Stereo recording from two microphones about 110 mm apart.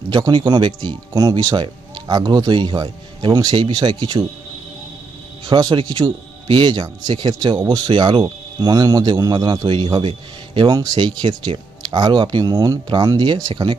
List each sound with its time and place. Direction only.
0.1 s speech: 40° right (ahead or behind)
5.5 s speech: 40° right (ahead or behind)